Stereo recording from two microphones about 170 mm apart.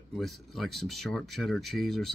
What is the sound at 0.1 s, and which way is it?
Speech, centre (ahead or behind).